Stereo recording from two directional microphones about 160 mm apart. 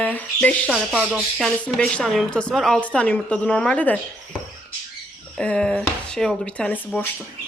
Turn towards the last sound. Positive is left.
turn(degrees=10)  # may be behind; listen again after turning